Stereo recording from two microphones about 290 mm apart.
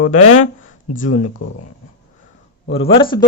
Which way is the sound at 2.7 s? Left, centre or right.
Centre.